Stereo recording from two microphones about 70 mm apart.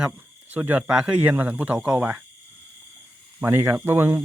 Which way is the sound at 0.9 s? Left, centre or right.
Centre.